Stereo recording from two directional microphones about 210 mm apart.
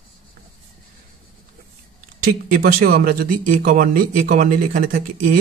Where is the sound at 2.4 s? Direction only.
45° right (ahead or behind).